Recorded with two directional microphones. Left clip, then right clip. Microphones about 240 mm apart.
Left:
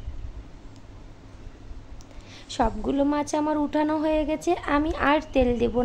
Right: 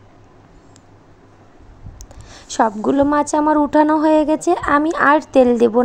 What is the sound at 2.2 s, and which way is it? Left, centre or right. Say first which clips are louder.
A woman's voice: right 9 dB; right.